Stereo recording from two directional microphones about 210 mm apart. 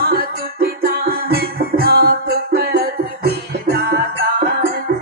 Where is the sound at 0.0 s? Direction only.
45° right (ahead or behind).